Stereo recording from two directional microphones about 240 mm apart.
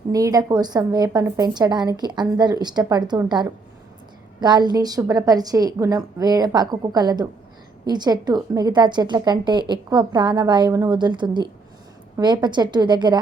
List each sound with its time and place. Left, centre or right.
0.1 s a woman's voice: centre